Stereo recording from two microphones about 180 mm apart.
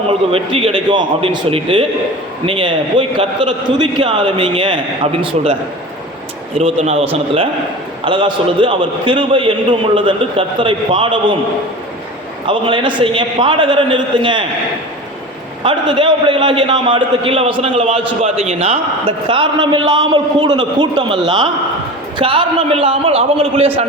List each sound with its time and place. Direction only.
0.1 s a man's voice: 30° right (ahead or behind)
6.6 s a man's voice: 35° right (ahead or behind)
12.5 s a man's voice: 30° right (ahead or behind)
15.6 s a man's voice: 25° right (ahead or behind)